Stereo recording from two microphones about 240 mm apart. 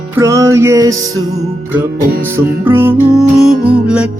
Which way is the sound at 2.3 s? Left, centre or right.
Centre.